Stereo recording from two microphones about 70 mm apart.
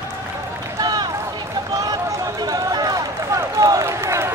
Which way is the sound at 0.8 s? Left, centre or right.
Right.